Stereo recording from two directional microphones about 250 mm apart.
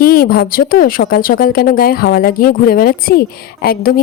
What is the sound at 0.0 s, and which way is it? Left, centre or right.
Speech, left.